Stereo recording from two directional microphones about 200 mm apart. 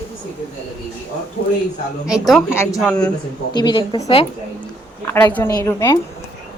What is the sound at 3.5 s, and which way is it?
Speech, 20° left (ahead or behind).